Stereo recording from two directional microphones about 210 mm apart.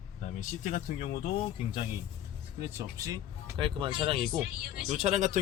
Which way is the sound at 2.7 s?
15° right (ahead or behind).